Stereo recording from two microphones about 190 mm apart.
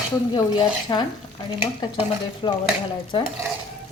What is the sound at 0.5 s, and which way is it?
A woman's voice, 25° left (ahead or behind).